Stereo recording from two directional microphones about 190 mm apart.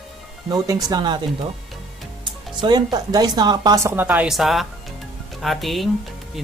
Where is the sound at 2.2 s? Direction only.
25° right (ahead or behind).